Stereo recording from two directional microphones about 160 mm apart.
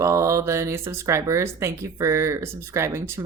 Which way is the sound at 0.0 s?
20° right (ahead or behind).